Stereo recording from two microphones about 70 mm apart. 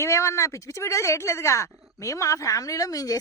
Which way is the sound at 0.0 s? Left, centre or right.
Left.